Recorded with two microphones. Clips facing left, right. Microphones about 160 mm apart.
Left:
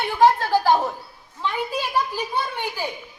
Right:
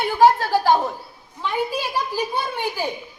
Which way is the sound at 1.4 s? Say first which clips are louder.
Right 2 dB; 10° right (ahead or behind).